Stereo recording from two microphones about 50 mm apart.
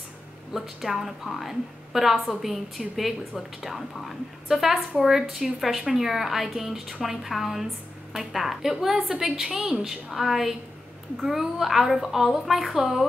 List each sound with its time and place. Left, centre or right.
0.5 s a woman's voice: centre